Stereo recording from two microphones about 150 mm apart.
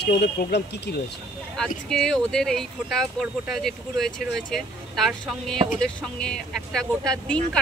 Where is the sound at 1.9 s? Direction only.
5° left (ahead or behind).